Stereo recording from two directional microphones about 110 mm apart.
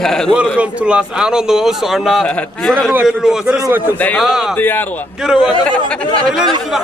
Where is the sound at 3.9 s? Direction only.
15° left (ahead or behind).